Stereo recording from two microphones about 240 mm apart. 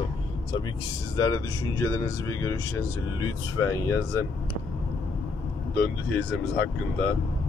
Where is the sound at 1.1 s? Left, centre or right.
Centre.